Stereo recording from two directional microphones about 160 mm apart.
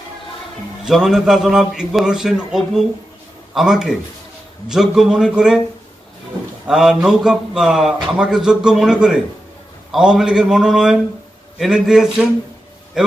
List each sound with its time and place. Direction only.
0.8 s a man's voice: 5° right (ahead or behind)
6.7 s a man's voice: 5° right (ahead or behind)